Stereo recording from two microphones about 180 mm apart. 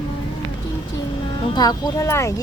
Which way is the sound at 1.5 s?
20° left (ahead or behind).